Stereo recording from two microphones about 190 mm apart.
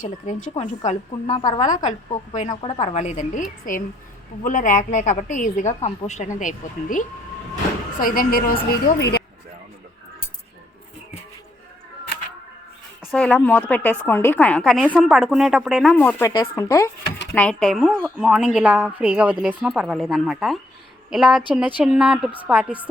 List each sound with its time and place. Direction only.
0.0 s a woman's voice: 40° left (ahead or behind)
0.9 s a woman's voice: 25° left (ahead or behind)
1.6 s a woman's voice: 40° left (ahead or behind)
7.9 s a woman's voice: 50° left (ahead or behind)
9.0 s speech: 60° left (ahead or behind)
13.1 s a woman's voice: 5° left (ahead or behind)